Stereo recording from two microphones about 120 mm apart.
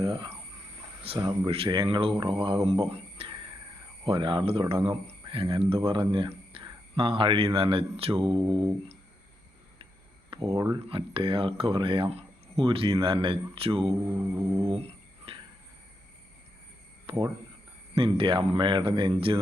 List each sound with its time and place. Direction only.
1.0 s speech: 50° right (ahead or behind)
10.2 s a sound: 45° right (ahead or behind)
10.5 s speech: 30° right (ahead or behind)
10.8 s speech: 50° right (ahead or behind)
13.9 s mantra: 25° right (ahead or behind)
14.6 s speech: 50° right (ahead or behind)
15.3 s a sound: 50° right (ahead or behind)
17.1 s speech: 50° right (ahead or behind)